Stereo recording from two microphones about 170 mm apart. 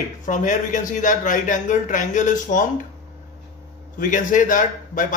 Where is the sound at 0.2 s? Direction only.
50° left (ahead or behind).